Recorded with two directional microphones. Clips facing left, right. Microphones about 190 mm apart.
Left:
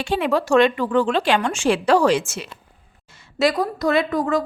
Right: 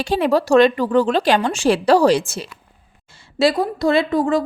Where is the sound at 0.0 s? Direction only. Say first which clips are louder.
Right 3 dB; 40° right (ahead or behind).